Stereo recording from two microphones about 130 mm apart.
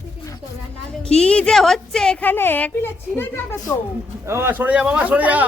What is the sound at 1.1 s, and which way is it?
A woman's voice, 10° left (ahead or behind).